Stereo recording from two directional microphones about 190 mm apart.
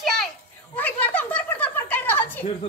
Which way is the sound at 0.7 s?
10° left (ahead or behind).